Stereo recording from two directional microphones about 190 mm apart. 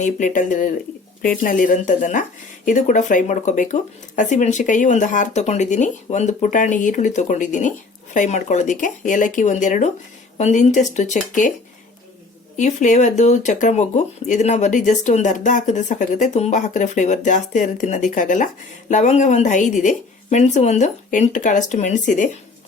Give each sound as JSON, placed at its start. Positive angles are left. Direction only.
{"t": 0.0, "sound": "speech", "side_deg": 40}
{"t": 12.5, "sound": "speech", "side_deg": 40}